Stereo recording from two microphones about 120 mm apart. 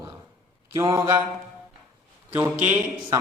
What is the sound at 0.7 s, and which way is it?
Speech, 25° right (ahead or behind).